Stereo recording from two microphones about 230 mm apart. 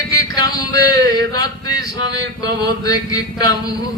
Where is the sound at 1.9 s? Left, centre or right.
Right.